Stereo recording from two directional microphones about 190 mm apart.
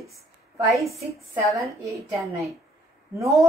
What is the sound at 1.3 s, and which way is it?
A woman's voice, 15° right (ahead or behind).